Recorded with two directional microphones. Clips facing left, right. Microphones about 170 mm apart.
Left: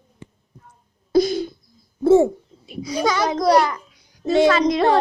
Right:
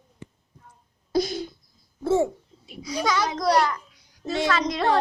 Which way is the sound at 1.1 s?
90° left.